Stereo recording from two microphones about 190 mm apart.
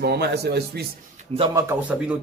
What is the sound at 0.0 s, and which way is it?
Speech, 60° right (ahead or behind).